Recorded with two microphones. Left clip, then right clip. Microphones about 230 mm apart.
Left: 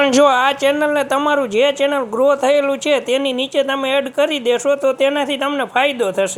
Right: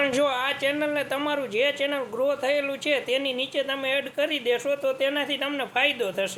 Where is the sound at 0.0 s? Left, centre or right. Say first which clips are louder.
Left 11 dB; left.